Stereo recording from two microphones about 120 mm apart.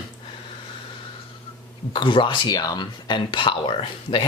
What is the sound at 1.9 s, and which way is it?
Speech, 45° left (ahead or behind).